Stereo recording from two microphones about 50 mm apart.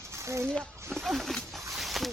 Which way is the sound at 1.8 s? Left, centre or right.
Centre.